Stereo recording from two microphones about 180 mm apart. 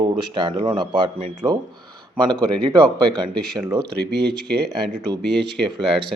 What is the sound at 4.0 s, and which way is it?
Speech, 65° right (ahead or behind).